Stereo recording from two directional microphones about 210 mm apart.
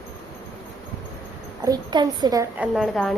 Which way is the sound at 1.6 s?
20° right (ahead or behind).